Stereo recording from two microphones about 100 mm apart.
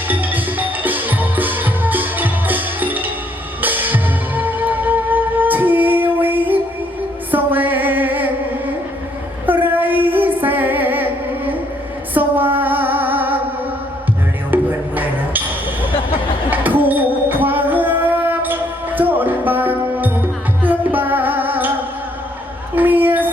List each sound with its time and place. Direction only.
0.1 s music: 20° right (ahead or behind)
9.5 s music: 20° right (ahead or behind)
14.5 s music: 20° right (ahead or behind)
16.5 s a sound: 15° right (ahead or behind)
20.6 s music: 20° right (ahead or behind)
22.7 s a sound: 20° right (ahead or behind)